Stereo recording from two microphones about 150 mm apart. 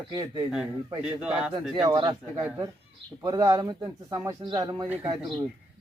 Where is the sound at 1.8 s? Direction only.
30° right (ahead or behind).